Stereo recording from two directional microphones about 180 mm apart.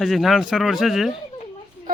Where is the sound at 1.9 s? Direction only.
50° right (ahead or behind).